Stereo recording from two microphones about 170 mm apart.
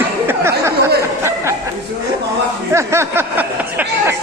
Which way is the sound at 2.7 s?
15° right (ahead or behind).